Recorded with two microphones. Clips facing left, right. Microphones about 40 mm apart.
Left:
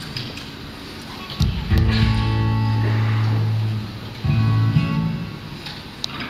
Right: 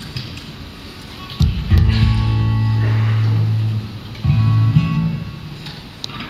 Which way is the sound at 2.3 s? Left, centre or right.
Centre.